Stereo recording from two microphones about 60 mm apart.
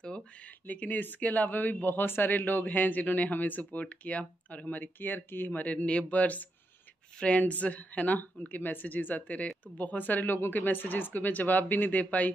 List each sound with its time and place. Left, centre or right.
0.7 s speech: left